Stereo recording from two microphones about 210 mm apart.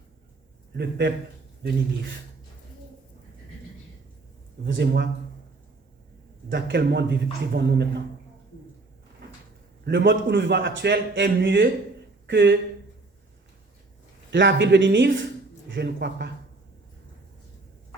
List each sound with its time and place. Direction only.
0.7 s a man's voice: 50° right (ahead or behind)
4.6 s a man's voice: 55° right (ahead or behind)
6.5 s a man's voice: 55° right (ahead or behind)
9.8 s a man's voice: 55° right (ahead or behind)
14.3 s a man's voice: 60° right (ahead or behind)